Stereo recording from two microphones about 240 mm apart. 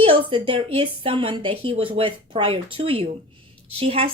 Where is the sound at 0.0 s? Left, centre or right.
Right.